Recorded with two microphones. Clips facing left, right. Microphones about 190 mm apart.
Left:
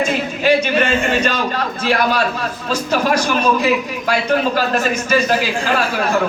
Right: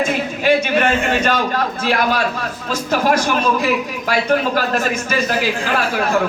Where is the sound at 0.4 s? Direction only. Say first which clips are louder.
Even; 50° right (ahead or behind).